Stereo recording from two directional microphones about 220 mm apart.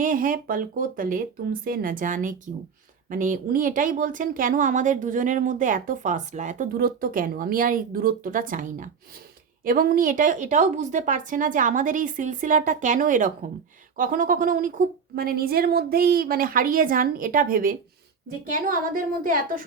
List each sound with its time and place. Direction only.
0.0 s speech: 40° right (ahead or behind)